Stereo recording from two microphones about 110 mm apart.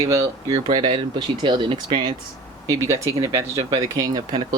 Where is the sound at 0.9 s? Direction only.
45° right (ahead or behind).